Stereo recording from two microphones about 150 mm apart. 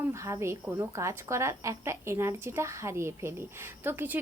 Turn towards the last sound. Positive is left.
turn(degrees=-15)  # may be behind; listen again after turning